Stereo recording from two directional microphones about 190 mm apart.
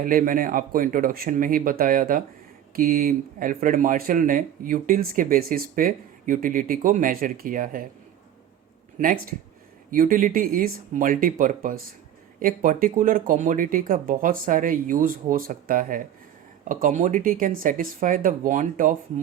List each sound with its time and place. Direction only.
0.0 s speech: 50° right (ahead or behind)
9.0 s speech: 45° right (ahead or behind)